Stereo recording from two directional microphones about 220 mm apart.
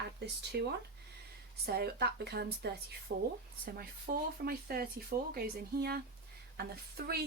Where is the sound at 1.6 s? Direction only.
45° right (ahead or behind).